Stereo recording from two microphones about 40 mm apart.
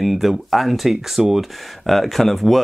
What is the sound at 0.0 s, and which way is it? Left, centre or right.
Speech, centre.